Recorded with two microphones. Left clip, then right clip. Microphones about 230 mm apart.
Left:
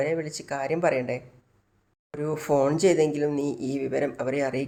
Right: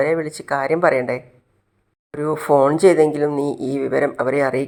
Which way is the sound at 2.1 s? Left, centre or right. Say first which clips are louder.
Right 8 dB; centre.